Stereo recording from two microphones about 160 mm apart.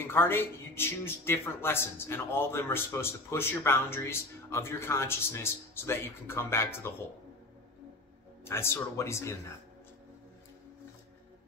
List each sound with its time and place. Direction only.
0.0 s a man's voice: 15° left (ahead or behind)
8.5 s a man's voice: 15° left (ahead or behind)